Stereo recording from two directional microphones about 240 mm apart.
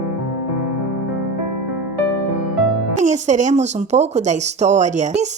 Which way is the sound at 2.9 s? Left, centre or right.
Right.